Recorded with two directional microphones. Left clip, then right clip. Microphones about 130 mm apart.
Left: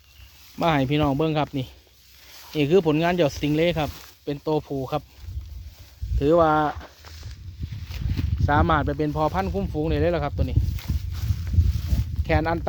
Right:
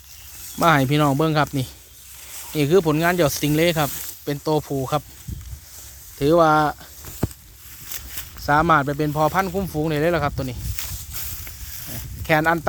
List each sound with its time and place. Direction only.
0.6 s speech: 5° left (ahead or behind)
2.6 s speech: 25° left (ahead or behind)
3.2 s speech: 10° left (ahead or behind)
6.1 s speech: 5° left (ahead or behind)
7.9 s speech: centre (ahead or behind)
12.2 s speech: centre (ahead or behind)